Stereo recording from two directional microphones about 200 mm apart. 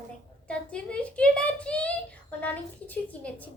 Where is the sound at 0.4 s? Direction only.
5° left (ahead or behind).